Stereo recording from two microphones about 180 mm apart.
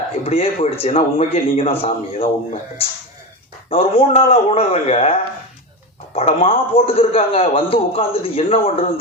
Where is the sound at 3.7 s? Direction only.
30° left (ahead or behind).